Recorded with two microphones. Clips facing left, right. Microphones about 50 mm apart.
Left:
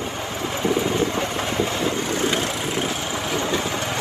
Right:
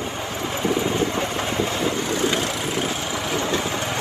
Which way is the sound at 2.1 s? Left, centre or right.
Left.